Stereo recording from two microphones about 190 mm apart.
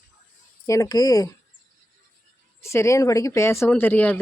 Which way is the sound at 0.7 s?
20° left (ahead or behind).